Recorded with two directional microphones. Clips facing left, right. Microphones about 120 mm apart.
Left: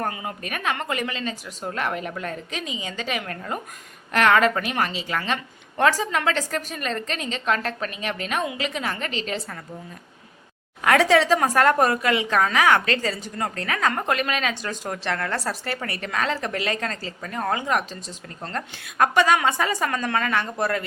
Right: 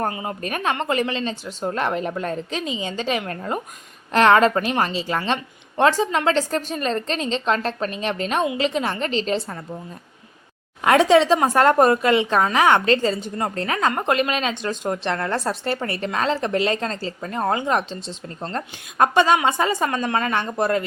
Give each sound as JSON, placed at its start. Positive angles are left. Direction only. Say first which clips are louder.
{"t": 0.0, "sound": "a woman's voice", "louder": "right 4 dB", "side_deg": -30}
{"t": 10.8, "sound": "a woman's voice", "louder": "right 3 dB", "side_deg": -20}